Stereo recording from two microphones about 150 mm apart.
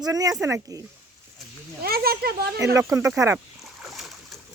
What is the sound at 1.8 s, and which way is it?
Speech, 90° right.